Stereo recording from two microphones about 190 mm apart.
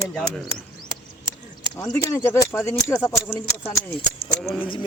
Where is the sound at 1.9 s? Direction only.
15° left (ahead or behind).